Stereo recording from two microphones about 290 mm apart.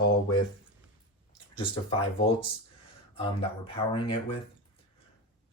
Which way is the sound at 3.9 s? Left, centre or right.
Centre.